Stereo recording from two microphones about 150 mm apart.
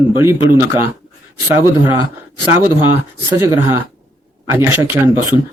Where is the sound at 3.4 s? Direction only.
20° right (ahead or behind).